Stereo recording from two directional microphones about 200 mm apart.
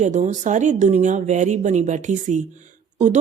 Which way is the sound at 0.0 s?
35° right (ahead or behind).